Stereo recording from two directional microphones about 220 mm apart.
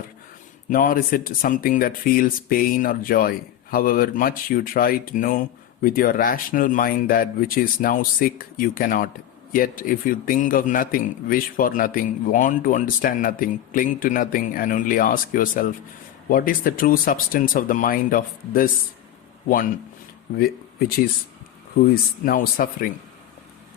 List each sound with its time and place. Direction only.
0.7 s a man's voice: 40° left (ahead or behind)
20.4 s speech: 45° left (ahead or behind)
22.2 s a man's voice: 40° left (ahead or behind)